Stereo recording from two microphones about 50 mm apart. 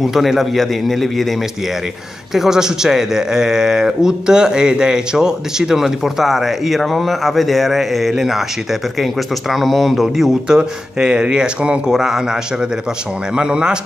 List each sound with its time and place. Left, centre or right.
0.0 s a man's voice: centre
2.3 s a man's voice: centre
11.9 s a man's voice: centre
13.4 s a man's voice: centre